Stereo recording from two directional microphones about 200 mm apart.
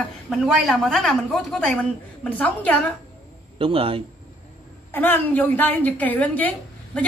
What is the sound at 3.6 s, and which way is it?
Speech, 30° right (ahead or behind).